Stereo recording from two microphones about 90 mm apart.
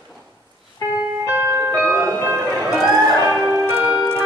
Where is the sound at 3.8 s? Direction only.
10° right (ahead or behind).